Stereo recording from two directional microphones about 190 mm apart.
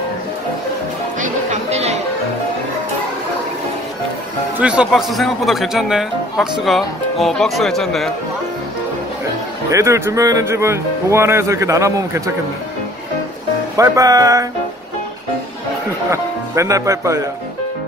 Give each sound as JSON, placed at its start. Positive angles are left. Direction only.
{"t": 1.2, "sound": "music", "side_deg": -35}
{"t": 4.6, "sound": "speech", "side_deg": -5}
{"t": 9.7, "sound": "speech", "side_deg": -15}
{"t": 13.7, "sound": "speech", "side_deg": -20}
{"t": 16.1, "sound": "speech", "side_deg": -15}